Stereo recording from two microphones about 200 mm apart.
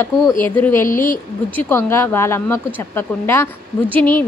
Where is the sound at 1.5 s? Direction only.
10° left (ahead or behind).